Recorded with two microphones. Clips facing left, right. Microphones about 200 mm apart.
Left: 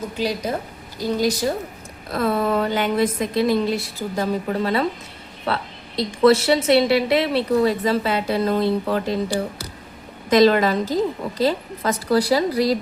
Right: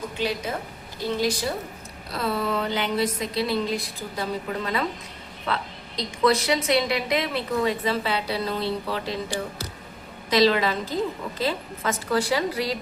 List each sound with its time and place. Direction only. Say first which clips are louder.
0.2 s a woman's voice: left 4 dB; 40° left (ahead or behind)
6.2 s a woman's voice: left 6 dB; 35° left (ahead or behind)
10.2 s a woman's voice: left 5 dB; 50° left (ahead or behind)